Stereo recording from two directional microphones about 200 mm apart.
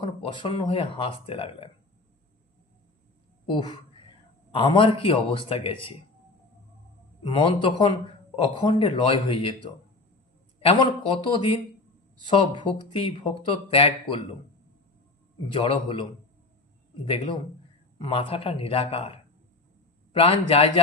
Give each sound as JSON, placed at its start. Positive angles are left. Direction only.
{"t": 0.0, "sound": "speech", "side_deg": 25}
{"t": 3.4, "sound": "speech", "side_deg": 25}
{"t": 7.2, "sound": "speech", "side_deg": 25}
{"t": 10.6, "sound": "speech", "side_deg": 25}
{"t": 15.5, "sound": "speech", "side_deg": 25}
{"t": 20.1, "sound": "speech", "side_deg": 30}